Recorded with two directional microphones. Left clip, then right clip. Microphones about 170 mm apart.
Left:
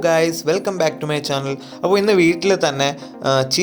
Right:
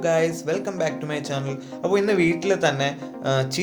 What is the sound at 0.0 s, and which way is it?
Speech, 50° left (ahead or behind).